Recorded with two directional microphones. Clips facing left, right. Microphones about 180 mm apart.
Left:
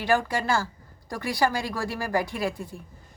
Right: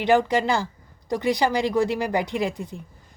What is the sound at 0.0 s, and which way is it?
Speech, 20° right (ahead or behind).